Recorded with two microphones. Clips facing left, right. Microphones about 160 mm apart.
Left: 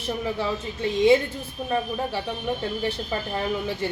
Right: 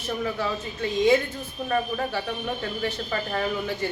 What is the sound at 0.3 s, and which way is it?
Speech, 25° left (ahead or behind).